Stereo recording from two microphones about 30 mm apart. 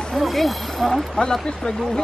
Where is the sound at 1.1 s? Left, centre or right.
Left.